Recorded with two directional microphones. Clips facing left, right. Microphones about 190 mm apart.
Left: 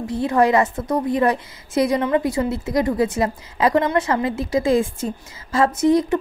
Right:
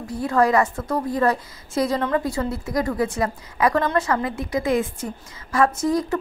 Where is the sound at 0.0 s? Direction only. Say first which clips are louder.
Left 2 dB; 20° left (ahead or behind).